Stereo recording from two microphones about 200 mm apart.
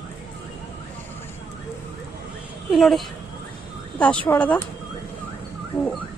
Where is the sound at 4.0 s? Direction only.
5° left (ahead or behind).